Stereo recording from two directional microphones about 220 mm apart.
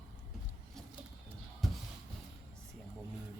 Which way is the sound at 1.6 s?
Centre (ahead or behind).